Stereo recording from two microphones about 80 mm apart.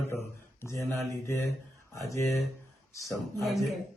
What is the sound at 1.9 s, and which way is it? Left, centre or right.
Speech, left.